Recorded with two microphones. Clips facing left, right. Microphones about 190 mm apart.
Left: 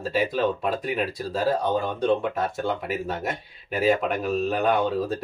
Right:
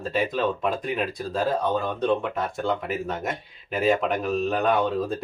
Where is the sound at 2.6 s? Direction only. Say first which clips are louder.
Right 1 dB; 5° left (ahead or behind).